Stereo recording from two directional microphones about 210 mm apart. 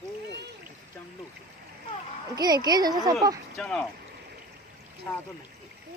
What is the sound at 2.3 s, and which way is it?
Speech, 20° right (ahead or behind).